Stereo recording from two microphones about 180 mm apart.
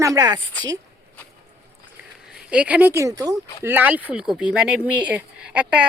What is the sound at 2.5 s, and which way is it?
Speech, 5° right (ahead or behind).